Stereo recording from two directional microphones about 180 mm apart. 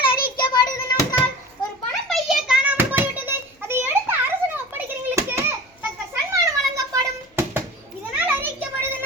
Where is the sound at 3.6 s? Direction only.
10° right (ahead or behind).